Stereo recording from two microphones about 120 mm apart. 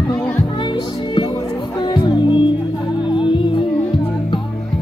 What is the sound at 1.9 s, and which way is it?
Music, 40° left (ahead or behind).